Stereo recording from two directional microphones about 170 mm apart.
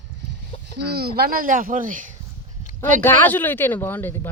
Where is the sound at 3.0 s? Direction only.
10° left (ahead or behind).